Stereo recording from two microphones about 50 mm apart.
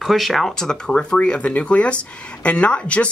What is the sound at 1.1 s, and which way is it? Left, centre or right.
Speech, centre.